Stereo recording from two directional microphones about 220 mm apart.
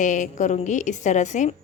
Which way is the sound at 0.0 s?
35° left (ahead or behind).